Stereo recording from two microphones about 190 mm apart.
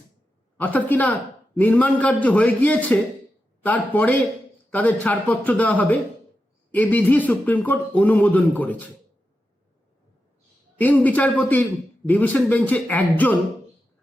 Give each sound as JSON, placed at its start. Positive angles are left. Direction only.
{"t": 0.5, "sound": "a man's voice", "side_deg": 10}
{"t": 10.8, "sound": "a man's voice", "side_deg": 10}